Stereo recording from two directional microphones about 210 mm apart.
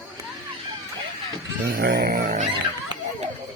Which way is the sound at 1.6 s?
45° right (ahead or behind).